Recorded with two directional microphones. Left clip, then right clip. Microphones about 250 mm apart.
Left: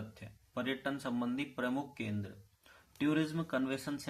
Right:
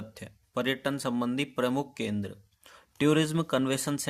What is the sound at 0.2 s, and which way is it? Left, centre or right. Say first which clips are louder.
Speech: right 9 dB; right.